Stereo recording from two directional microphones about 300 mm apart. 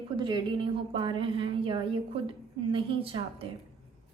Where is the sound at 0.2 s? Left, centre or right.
Centre.